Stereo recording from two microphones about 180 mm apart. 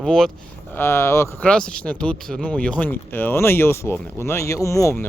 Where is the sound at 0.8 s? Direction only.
15° left (ahead or behind).